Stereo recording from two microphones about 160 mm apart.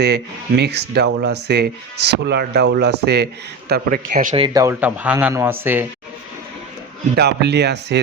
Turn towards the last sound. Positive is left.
turn(degrees=-90)